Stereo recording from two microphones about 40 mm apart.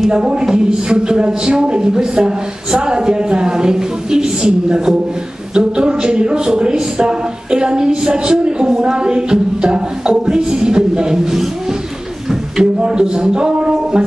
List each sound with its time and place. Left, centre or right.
0.1 s speech: centre
12.3 s speech: centre